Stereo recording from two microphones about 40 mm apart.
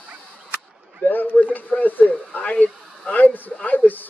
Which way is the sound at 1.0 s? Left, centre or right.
Left.